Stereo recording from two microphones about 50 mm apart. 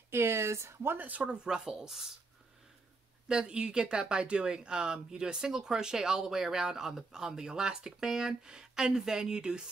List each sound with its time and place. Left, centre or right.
0.1 s speech: right
0.8 s speech: right
1.2 s speech: centre
3.3 s speech: centre